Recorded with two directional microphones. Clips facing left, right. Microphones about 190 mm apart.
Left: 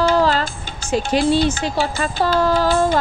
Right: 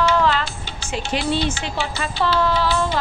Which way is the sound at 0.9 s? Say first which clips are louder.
Left 6 dB; 45° left (ahead or behind).